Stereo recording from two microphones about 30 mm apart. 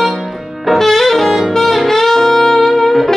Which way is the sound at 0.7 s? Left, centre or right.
Centre.